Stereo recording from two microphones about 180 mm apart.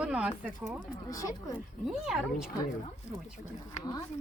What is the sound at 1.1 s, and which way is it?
Speech, 20° left (ahead or behind).